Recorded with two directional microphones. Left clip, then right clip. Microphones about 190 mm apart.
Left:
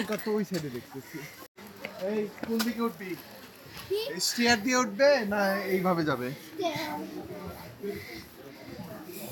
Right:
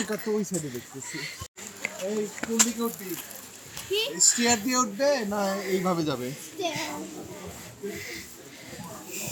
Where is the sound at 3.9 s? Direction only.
15° left (ahead or behind).